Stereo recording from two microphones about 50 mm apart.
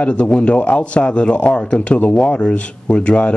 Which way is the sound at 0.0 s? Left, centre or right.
Left.